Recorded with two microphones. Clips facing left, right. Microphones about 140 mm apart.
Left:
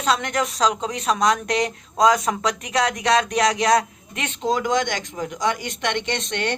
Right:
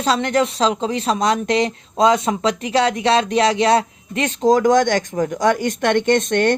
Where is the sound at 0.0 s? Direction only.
30° right (ahead or behind).